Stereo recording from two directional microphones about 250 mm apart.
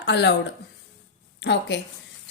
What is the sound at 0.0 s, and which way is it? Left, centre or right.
Speech, left.